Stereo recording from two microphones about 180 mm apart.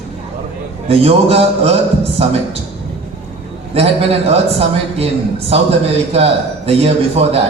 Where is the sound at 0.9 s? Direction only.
35° right (ahead or behind).